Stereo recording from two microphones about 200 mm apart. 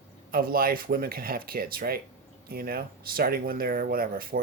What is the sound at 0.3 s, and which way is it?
Speech, 45° right (ahead or behind).